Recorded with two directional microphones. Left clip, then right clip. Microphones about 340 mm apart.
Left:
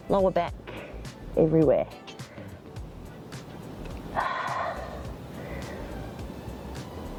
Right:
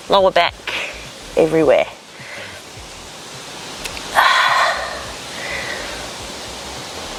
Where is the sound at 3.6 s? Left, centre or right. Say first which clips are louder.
Right 15 dB; centre.